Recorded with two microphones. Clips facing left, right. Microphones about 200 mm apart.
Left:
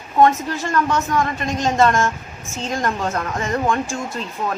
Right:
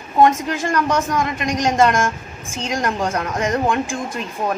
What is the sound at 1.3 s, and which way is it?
A woman's voice, 15° right (ahead or behind).